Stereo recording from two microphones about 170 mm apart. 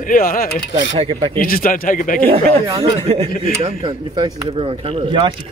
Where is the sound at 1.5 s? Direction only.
55° left (ahead or behind).